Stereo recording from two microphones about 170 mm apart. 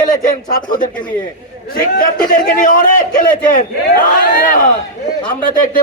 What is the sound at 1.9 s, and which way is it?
A man's voice, 55° left (ahead or behind).